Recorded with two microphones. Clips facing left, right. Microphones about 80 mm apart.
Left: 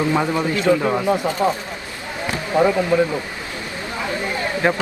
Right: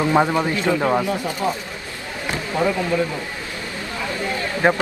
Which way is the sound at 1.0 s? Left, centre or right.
Left.